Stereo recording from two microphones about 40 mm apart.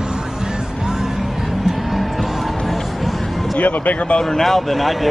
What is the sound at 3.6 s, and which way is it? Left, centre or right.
Speech, left.